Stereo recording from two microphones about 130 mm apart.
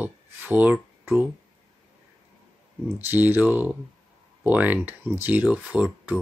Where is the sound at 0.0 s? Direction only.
15° right (ahead or behind).